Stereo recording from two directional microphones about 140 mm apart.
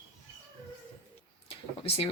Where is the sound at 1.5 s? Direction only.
45° left (ahead or behind).